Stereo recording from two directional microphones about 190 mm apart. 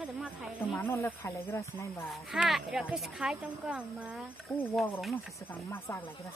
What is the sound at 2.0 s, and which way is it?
Speech, centre (ahead or behind).